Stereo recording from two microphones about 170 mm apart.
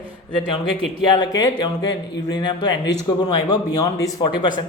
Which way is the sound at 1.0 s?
25° left (ahead or behind).